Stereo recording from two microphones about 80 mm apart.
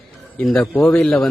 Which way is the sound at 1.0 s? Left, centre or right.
Centre.